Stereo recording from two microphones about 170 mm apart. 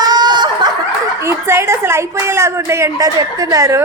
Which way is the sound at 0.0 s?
25° right (ahead or behind).